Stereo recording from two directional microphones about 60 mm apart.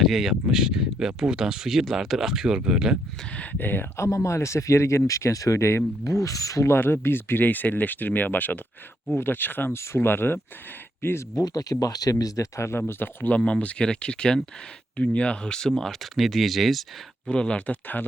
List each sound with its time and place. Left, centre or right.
0.0 s speech: centre
3.3 s speech: left
3.9 s speech: left
6.7 s speech: left
9.7 s speech: left
11.3 s speech: left
12.5 s speech: left
12.9 s speech: left; by 16.8 s centre
17.2 s speech: centre